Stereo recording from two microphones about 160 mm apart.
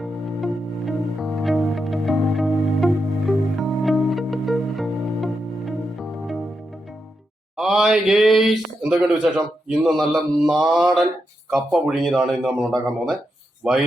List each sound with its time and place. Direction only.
0.0 s music: centre (ahead or behind)
7.5 s a sound: centre (ahead or behind)
9.2 s speech: centre (ahead or behind)